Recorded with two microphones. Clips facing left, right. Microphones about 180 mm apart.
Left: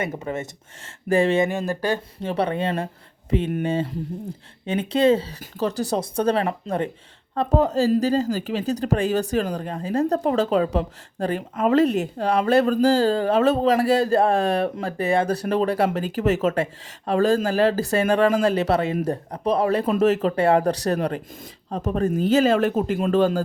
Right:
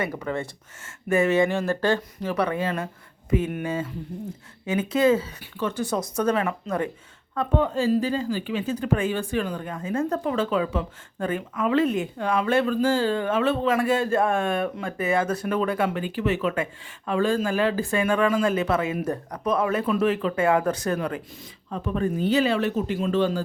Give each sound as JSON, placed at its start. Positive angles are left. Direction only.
{"t": 0.0, "sound": "speech", "side_deg": 25}
{"t": 1.5, "sound": "speech", "side_deg": 15}
{"t": 2.2, "sound": "speech", "side_deg": 25}